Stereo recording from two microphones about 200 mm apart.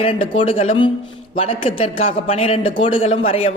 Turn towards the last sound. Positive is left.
turn(degrees=30)  # may be behind; listen again after turning